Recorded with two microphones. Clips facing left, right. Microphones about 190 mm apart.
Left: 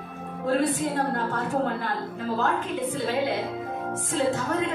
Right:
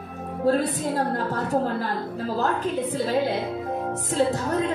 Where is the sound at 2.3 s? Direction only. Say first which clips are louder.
Right 2 dB; 35° right (ahead or behind).